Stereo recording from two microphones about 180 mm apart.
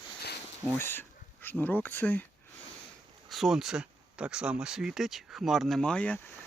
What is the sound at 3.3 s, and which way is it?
Speech, centre (ahead or behind).